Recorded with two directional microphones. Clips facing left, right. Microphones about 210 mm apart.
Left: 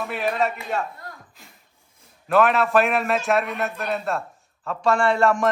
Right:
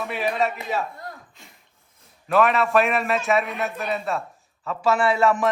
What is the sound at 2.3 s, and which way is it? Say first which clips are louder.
A man's voice: left 1 dB; centre (ahead or behind).